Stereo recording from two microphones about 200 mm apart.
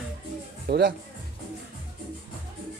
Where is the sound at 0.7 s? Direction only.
50° right (ahead or behind).